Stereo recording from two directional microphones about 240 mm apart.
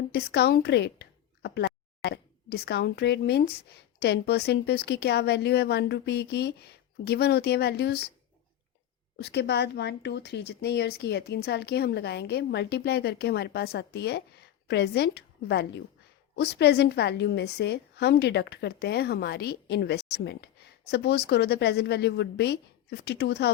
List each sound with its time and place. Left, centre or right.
0.1 s speech: left
9.1 s speech: left